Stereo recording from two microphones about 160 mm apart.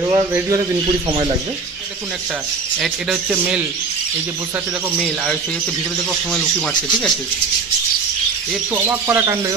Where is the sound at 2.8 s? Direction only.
5° right (ahead or behind).